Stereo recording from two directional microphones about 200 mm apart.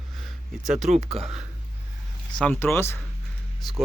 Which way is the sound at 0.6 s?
Centre (ahead or behind).